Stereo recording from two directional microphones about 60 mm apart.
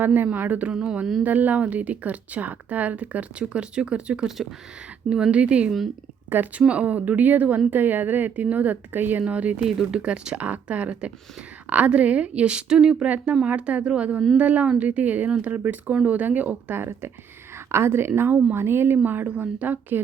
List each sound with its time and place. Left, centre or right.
0.0 s speech: right
0.7 s speech: centre
1.2 s speech: right; by 5.3 s centre
5.3 s speech: centre
9.6 s speech: centre
13.1 s speech: right
16.7 s speech: right